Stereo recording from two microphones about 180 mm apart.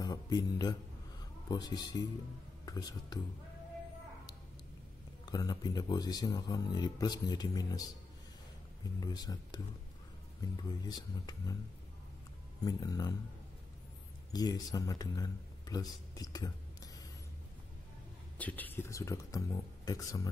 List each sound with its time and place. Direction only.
0.0 s speech: 20° left (ahead or behind)
5.2 s speech: 20° left (ahead or behind)
9.0 s speech: 20° left (ahead or behind)
12.6 s speech: 20° left (ahead or behind)
14.3 s speech: 20° left (ahead or behind)
18.4 s speech: 10° left (ahead or behind)